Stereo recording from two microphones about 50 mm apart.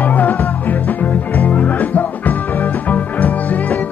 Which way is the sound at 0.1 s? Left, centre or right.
Left.